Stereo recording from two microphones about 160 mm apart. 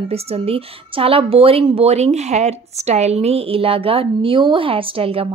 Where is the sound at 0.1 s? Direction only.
40° right (ahead or behind).